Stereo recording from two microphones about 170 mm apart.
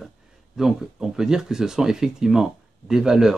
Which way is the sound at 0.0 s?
Centre (ahead or behind).